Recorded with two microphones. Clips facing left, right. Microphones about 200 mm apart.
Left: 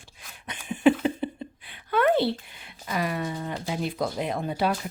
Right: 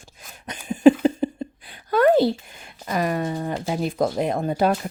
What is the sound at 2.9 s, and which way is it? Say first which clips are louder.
Speech: right 5 dB; 45° right (ahead or behind).